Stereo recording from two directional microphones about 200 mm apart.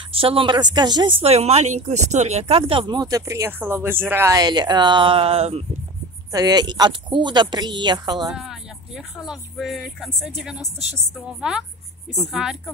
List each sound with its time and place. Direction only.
0.1 s speech: 25° right (ahead or behind)
1.2 s speech: 30° right (ahead or behind)
6.3 s speech: 20° right (ahead or behind)
8.3 s speech: centre (ahead or behind)